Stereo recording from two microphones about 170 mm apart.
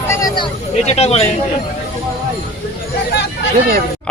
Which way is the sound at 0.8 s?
40° left (ahead or behind).